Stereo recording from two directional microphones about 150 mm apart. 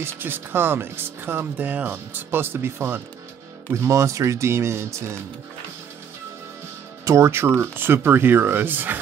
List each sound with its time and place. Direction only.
0.0 s speech: 15° right (ahead or behind)
7.1 s speech: 15° right (ahead or behind)